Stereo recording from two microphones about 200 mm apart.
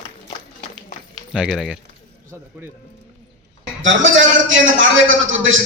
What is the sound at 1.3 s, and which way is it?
Speech, centre (ahead or behind).